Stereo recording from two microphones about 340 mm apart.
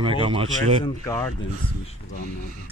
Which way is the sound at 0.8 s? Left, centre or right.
Centre.